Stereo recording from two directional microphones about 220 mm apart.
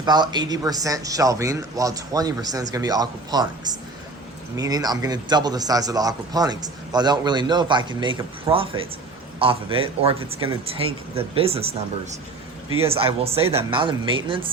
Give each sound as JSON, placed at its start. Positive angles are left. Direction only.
{"t": 0.0, "sound": "speech", "side_deg": -20}
{"t": 4.5, "sound": "a man's voice", "side_deg": -15}
{"t": 12.9, "sound": "a man's voice", "side_deg": -25}